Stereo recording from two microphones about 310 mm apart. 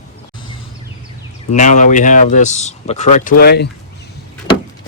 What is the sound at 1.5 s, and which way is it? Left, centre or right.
Speech, left.